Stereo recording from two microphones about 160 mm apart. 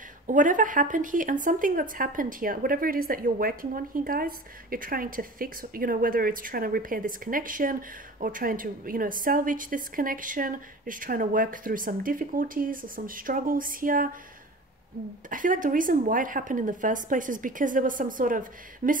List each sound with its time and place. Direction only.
0.3 s a woman's voice: 55° right (ahead or behind)
15.2 s a woman's voice: 55° right (ahead or behind)